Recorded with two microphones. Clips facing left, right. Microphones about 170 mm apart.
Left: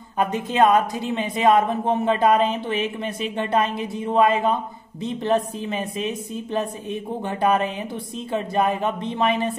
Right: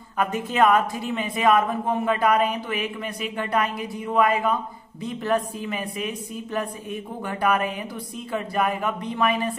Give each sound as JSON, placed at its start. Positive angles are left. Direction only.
{"t": 0.2, "sound": "speech", "side_deg": 20}